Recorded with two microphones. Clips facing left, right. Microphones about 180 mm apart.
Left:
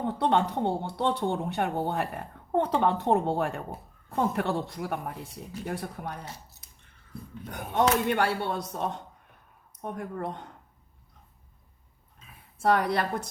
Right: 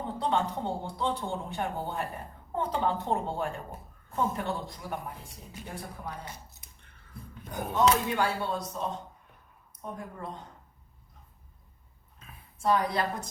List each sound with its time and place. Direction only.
0.0 s a woman's voice: 65° left (ahead or behind)
7.8 s speech: 65° left (ahead or behind)
12.6 s speech: 65° left (ahead or behind)